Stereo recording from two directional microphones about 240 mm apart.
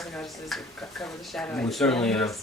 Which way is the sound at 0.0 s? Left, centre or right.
Centre.